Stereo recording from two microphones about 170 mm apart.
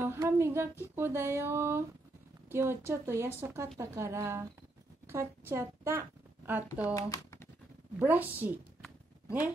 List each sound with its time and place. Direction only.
0.0 s a woman's voice: 15° right (ahead or behind)
6.7 s speech: 20° left (ahead or behind)
8.0 s a woman's voice: 10° right (ahead or behind)